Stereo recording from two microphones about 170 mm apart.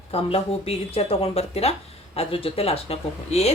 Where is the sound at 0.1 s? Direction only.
35° left (ahead or behind).